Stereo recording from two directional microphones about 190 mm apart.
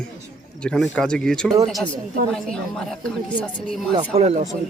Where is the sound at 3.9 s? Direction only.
35° right (ahead or behind).